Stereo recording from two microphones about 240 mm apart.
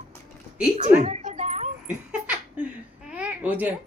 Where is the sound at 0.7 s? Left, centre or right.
Right.